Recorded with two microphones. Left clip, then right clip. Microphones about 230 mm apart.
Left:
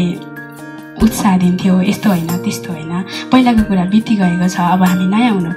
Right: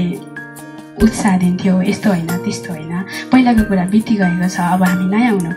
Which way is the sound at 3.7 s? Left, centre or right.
Left.